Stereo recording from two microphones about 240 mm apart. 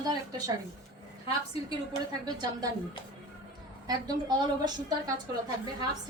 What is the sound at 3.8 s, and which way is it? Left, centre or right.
A woman's voice, centre.